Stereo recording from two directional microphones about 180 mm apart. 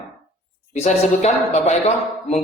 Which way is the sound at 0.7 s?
40° left (ahead or behind).